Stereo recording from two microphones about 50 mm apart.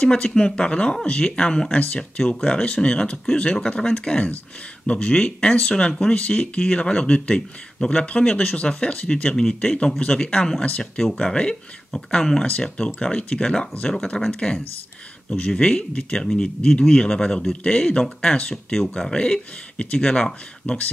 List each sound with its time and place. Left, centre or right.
0.0 s speech: centre
14.2 s speech: centre
15.2 s speech: centre